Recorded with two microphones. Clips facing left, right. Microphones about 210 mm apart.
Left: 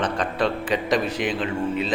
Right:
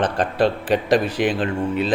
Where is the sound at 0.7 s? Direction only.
60° right (ahead or behind).